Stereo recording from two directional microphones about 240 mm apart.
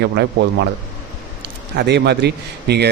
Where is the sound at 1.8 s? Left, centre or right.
Right.